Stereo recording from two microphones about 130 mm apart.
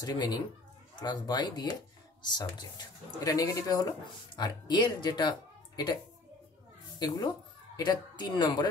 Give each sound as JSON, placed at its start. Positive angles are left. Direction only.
{"t": 0.0, "sound": "speech", "side_deg": 35}
{"t": 7.0, "sound": "speech", "side_deg": 30}